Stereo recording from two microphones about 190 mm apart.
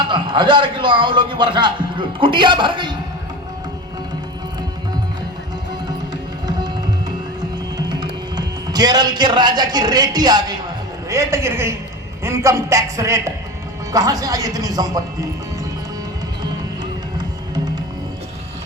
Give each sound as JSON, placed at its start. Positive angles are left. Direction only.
{"t": 0.1, "sound": "a man's voice", "side_deg": -25}
{"t": 7.8, "sound": "a man's voice", "side_deg": -20}